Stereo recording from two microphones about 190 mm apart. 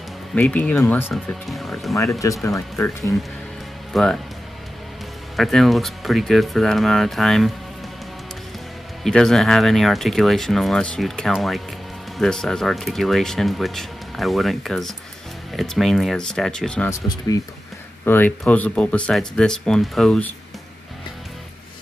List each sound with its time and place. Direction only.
0.3 s speech: 5° left (ahead or behind)
2.1 s speech: 15° left (ahead or behind)
3.9 s speech: 5° left (ahead or behind)
5.3 s speech: centre (ahead or behind)
9.0 s speech: centre (ahead or behind)
18.0 s speech: 10° left (ahead or behind)